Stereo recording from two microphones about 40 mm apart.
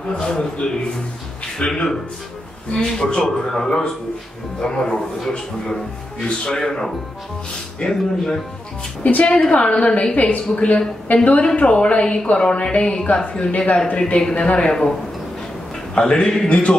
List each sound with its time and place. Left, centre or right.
0.1 s a woman's voice: left
2.7 s speech: centre
9.0 s speech: left
10.1 s a woman's voice: left
11.4 s a woman's voice: left
14.6 s speech: centre
16.0 s speech: centre
16.4 s speech: left